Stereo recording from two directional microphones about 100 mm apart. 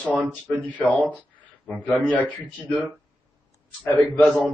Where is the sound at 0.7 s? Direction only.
20° left (ahead or behind).